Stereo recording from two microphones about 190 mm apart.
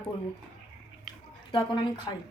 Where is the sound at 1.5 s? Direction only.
25° left (ahead or behind).